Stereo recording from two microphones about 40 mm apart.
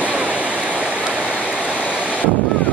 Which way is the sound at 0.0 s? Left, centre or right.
Right.